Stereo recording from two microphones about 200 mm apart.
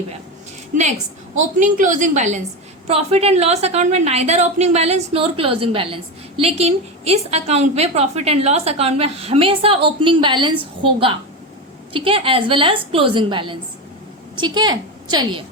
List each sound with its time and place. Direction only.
0.7 s a woman's voice: 40° right (ahead or behind)
11.9 s a woman's voice: 25° right (ahead or behind)